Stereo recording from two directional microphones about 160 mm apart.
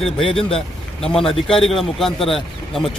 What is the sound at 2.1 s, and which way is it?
Speech, 35° left (ahead or behind).